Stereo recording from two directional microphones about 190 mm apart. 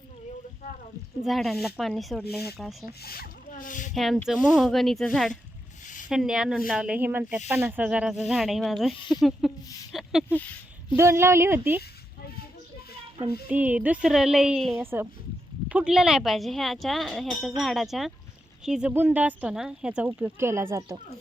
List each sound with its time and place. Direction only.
1.2 s speech: centre (ahead or behind)
3.0 s speech: 55° left (ahead or behind)
3.9 s speech: centre (ahead or behind)
9.9 s a sound: centre (ahead or behind)
10.9 s speech: 15° right (ahead or behind)
13.5 s speech: 10° right (ahead or behind)